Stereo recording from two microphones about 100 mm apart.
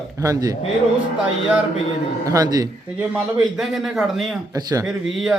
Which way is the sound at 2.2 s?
35° right (ahead or behind).